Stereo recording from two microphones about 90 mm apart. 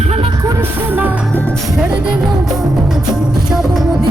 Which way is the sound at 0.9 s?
20° right (ahead or behind).